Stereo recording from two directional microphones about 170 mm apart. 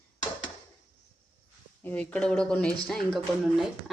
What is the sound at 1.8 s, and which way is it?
Speech, 10° left (ahead or behind).